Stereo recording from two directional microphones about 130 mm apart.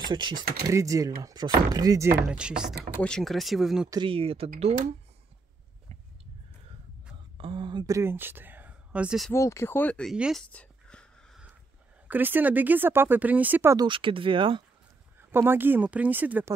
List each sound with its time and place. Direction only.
0.1 s speech: 35° right (ahead or behind)
0.7 s speech: 25° right (ahead or behind)
2.2 s speech: 5° right (ahead or behind)
3.0 s speech: 5° left (ahead or behind)
4.0 s speech: 45° right (ahead or behind)
7.3 s speech: 40° right (ahead or behind); by 9.2 s 10° right (ahead or behind)
9.3 s speech: 20° left (ahead or behind)
10.1 s speech: 5° right (ahead or behind)
10.4 s a sound: 10° left (ahead or behind)
12.1 s speech: 15° right (ahead or behind)
13.7 s speech: 40° right (ahead or behind)
15.1 s speech: 15° right (ahead or behind)